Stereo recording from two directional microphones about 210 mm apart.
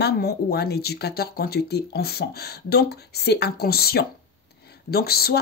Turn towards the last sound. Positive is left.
turn(degrees=45)  # may be behind; listen again after turning